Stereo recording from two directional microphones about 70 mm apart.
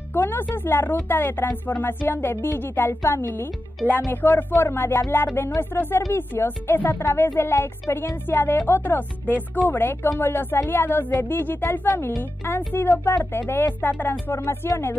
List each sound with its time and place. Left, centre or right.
0.1 s a woman's voice: left